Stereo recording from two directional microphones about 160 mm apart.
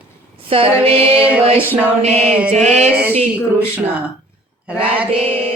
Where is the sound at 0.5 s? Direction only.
35° right (ahead or behind).